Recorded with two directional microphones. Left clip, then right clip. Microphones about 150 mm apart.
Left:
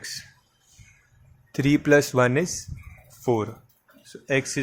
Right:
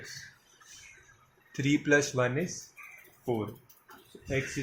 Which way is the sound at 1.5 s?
60° left (ahead or behind).